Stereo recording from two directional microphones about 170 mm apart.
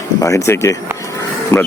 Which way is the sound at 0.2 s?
20° left (ahead or behind).